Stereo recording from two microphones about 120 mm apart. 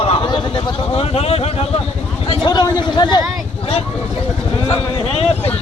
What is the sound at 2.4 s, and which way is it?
Speech, 35° left (ahead or behind).